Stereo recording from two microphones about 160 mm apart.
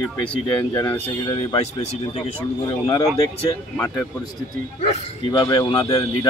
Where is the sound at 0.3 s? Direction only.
25° left (ahead or behind).